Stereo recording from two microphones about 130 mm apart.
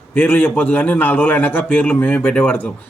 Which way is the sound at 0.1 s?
15° left (ahead or behind).